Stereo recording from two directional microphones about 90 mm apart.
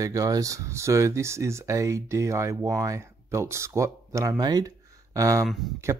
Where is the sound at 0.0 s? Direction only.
40° right (ahead or behind).